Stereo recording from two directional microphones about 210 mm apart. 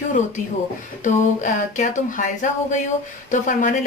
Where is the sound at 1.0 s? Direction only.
35° left (ahead or behind).